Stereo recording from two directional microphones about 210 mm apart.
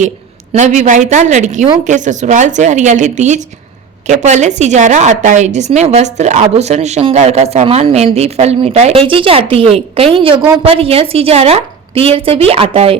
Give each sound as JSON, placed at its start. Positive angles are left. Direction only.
{"t": 0.5, "sound": "a woman's voice", "side_deg": -35}